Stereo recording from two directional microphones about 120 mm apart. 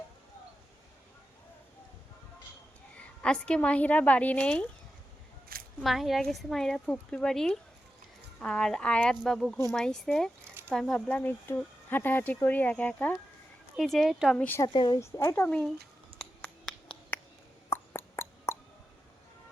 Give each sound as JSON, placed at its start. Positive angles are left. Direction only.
{"t": 3.2, "sound": "speech", "side_deg": 10}
{"t": 5.8, "sound": "speech", "side_deg": 0}
{"t": 10.4, "sound": "a sound", "side_deg": -20}
{"t": 10.7, "sound": "speech", "side_deg": 5}
{"t": 13.7, "sound": "speech", "side_deg": 0}
{"t": 14.3, "sound": "speech", "side_deg": 15}
{"t": 14.7, "sound": "speech", "side_deg": 40}
{"t": 14.9, "sound": "speech", "side_deg": 25}
{"t": 16.1, "sound": "finger snapping", "side_deg": 10}
{"t": 17.7, "sound": "a sound", "side_deg": 20}